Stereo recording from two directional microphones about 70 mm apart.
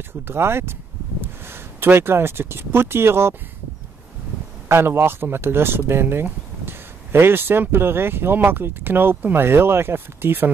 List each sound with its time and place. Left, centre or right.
0.3 s speech: right
4.6 s speech: right